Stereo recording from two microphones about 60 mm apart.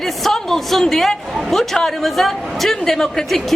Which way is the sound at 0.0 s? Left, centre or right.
Centre.